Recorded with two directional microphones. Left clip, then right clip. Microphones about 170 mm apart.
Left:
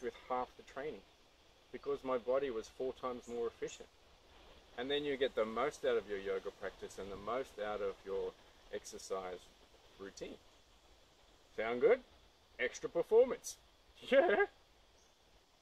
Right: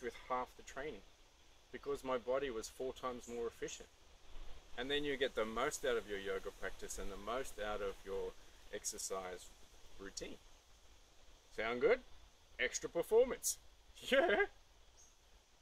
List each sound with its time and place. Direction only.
0.0 s speech: 10° right (ahead or behind)
11.5 s speech: 10° right (ahead or behind)